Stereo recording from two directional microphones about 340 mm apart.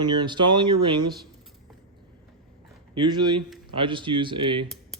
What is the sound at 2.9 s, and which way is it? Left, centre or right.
Speech, centre.